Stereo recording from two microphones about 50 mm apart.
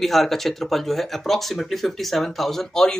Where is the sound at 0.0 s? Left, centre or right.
Centre.